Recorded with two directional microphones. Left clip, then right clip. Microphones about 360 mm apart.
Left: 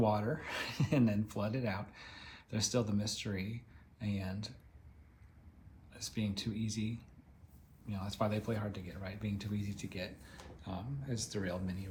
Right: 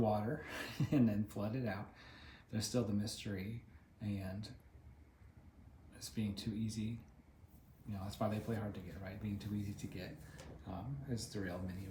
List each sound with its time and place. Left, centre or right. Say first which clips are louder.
0.0 s speech: left 4 dB; centre
5.9 s speech: left 4 dB; centre
7.9 s speech: left 4 dB; centre